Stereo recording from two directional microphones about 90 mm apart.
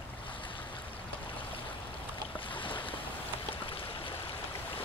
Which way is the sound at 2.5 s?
70° left (ahead or behind).